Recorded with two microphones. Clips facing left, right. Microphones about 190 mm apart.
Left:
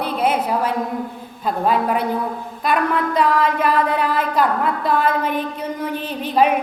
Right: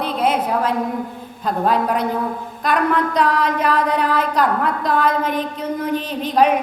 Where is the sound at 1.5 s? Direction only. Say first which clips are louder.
Even; 5° left (ahead or behind).